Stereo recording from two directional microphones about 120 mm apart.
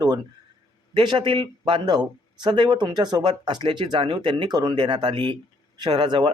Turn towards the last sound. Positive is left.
turn(degrees=-40)  # may be behind; listen again after turning